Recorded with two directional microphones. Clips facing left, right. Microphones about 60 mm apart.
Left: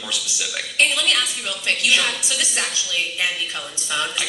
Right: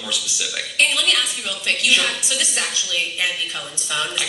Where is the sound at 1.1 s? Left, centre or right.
Centre.